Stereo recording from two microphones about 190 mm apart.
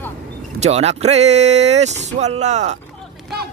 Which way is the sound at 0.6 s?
35° right (ahead or behind).